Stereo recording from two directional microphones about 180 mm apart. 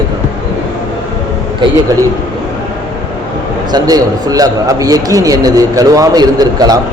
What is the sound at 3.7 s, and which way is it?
A man's voice, 20° right (ahead or behind).